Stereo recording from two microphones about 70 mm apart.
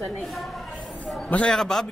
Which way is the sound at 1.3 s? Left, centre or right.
Centre.